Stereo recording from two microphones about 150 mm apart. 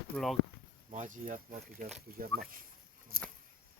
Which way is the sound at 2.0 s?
80° right.